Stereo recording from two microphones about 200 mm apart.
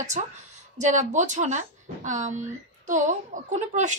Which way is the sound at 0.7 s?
35° right (ahead or behind).